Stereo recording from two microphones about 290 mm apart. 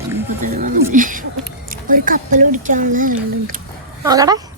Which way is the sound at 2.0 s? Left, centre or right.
Right.